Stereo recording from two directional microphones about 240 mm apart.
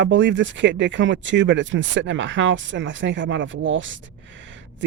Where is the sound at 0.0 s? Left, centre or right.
Right.